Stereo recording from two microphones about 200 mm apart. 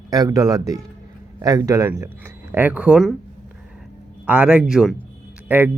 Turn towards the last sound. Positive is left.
turn(degrees=-10)  # may be behind; listen again after turning